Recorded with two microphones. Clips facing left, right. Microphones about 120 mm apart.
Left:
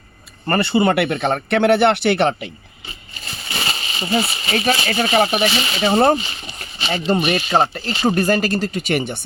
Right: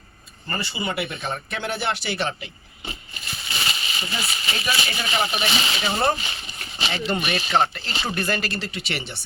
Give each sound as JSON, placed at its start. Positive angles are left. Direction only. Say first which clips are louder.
{"t": 0.4, "sound": "speech", "louder": "left 12 dB", "side_deg": 65}
{"t": 3.7, "sound": "speech", "louder": "left 13 dB", "side_deg": 40}